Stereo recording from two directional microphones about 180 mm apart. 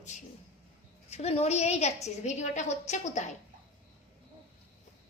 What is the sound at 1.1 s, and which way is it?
A woman's voice, 35° left (ahead or behind).